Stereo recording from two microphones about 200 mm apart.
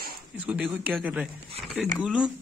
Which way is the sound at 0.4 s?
5° right (ahead or behind).